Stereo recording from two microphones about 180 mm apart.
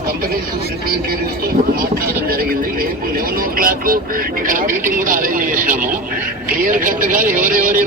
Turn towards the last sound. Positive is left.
turn(degrees=-50)  # may be behind; listen again after turning